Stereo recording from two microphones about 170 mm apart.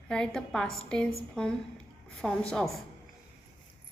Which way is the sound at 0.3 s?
5° left (ahead or behind).